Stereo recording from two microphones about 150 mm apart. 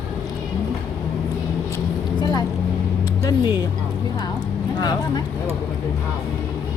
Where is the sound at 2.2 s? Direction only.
30° left (ahead or behind).